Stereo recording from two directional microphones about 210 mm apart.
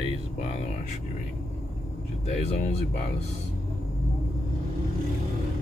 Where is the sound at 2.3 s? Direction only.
30° left (ahead or behind).